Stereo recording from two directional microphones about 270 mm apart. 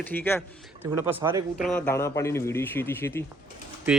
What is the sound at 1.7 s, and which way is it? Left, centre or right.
A man's voice, centre.